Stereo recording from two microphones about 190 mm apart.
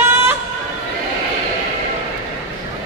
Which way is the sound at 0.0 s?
15° right (ahead or behind).